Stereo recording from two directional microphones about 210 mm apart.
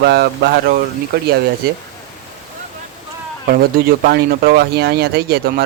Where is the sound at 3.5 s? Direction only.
45° right (ahead or behind).